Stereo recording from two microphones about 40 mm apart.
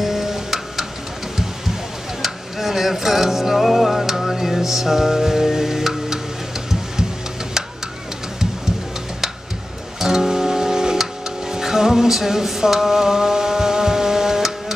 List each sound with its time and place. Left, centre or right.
0.0 s music: centre
2.2 s music: centre
9.9 s music: centre